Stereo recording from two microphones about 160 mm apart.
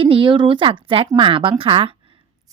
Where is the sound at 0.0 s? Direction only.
30° right (ahead or behind).